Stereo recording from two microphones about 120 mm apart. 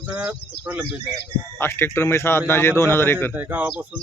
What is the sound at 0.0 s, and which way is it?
Speech, 10° right (ahead or behind).